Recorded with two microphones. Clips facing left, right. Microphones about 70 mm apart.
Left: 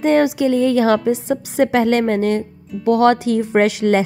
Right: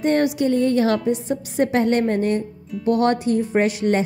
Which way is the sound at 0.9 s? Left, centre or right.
Left.